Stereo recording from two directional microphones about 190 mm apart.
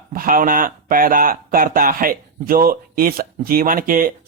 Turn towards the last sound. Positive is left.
turn(degrees=-50)  # may be behind; listen again after turning